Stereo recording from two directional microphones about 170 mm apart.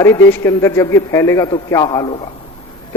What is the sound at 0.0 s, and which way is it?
A man's voice, 15° left (ahead or behind).